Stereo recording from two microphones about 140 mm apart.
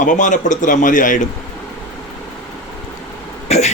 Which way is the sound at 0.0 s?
65° left (ahead or behind).